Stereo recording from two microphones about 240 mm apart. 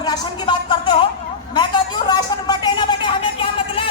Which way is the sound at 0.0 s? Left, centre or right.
Centre.